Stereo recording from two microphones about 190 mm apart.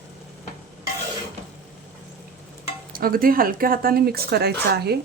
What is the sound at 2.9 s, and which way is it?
Speech, 50° right (ahead or behind).